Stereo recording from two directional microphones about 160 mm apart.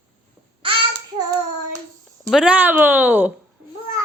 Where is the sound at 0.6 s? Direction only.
35° right (ahead or behind).